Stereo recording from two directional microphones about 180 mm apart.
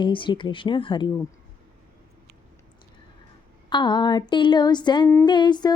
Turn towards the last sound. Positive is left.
turn(degrees=25)  # may be behind; listen again after turning